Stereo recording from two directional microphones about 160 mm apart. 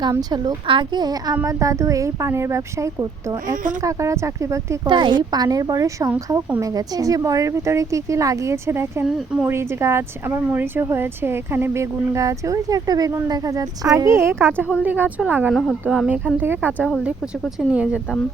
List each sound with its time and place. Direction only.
0.0 s speech: 25° right (ahead or behind)
3.5 s speech: 55° right (ahead or behind)
3.8 s speech: 20° right (ahead or behind)
4.9 s speech: 30° right (ahead or behind)
9.0 s speech: 5° right (ahead or behind)
9.5 s speech: 15° right (ahead or behind)